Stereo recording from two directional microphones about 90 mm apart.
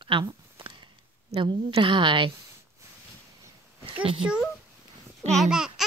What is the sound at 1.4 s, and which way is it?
Speech, 65° right (ahead or behind).